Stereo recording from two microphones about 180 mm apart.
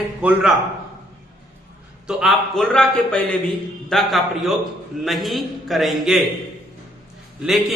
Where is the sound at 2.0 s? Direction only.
Centre (ahead or behind).